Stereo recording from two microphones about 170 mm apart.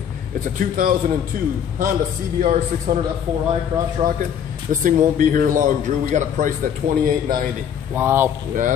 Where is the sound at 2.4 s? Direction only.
45° right (ahead or behind).